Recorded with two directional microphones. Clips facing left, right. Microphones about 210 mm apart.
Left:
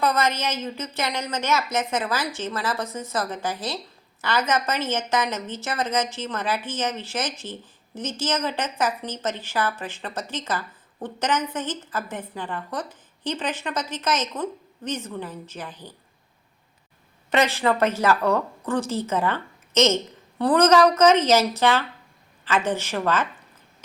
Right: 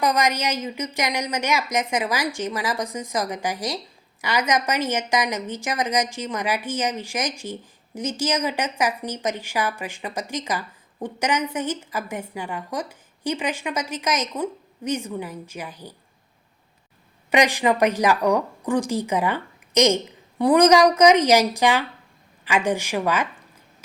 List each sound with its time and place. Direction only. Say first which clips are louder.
0.0 s a woman's voice: right 1 dB; 15° right (ahead or behind)
17.2 s a woman's voice: right 2 dB; 15° right (ahead or behind)